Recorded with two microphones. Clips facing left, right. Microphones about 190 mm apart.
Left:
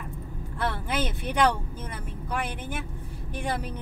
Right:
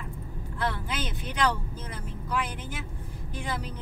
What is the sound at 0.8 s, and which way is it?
Vehicle, 55° left (ahead or behind).